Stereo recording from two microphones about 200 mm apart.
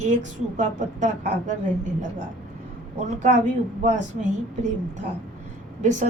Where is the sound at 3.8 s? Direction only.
40° right (ahead or behind).